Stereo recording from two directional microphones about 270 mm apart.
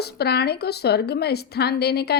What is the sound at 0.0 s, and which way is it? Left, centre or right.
Speech, left.